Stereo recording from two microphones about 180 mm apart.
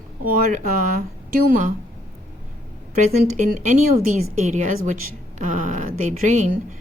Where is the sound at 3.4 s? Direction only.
45° right (ahead or behind).